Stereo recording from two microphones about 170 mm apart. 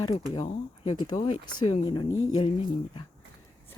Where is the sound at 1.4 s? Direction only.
25° left (ahead or behind).